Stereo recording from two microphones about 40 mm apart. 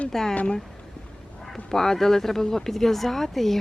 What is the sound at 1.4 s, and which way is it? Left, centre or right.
Speech, centre.